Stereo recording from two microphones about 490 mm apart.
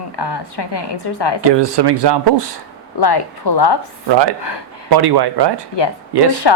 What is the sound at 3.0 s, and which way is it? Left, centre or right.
Speech, left.